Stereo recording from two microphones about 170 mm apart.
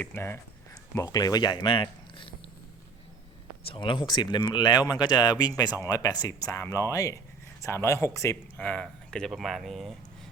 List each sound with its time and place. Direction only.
0.0 s speech: 15° left (ahead or behind); by 2.3 s 30° left (ahead or behind)
3.7 s speech: 30° left (ahead or behind); by 9.9 s centre (ahead or behind)